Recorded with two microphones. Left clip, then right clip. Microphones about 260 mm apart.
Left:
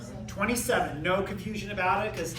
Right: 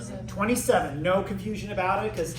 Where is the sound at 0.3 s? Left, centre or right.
Centre.